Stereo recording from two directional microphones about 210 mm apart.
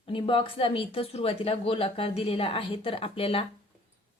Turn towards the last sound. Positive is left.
turn(degrees=25)  # may be behind; listen again after turning